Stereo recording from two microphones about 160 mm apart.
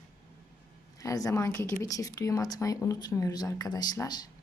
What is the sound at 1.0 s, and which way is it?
Speech, 20° left (ahead or behind).